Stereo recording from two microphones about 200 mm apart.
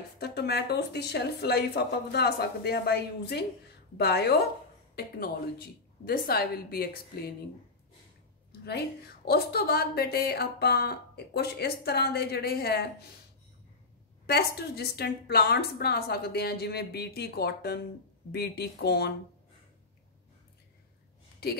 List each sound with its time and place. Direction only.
0.2 s a woman's voice: 55° left (ahead or behind)
8.5 s a woman's voice: 55° left (ahead or behind)
14.2 s a woman's voice: 55° left (ahead or behind)